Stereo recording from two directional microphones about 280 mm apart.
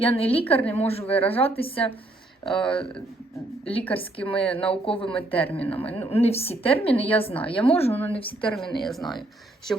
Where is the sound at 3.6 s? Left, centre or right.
Centre.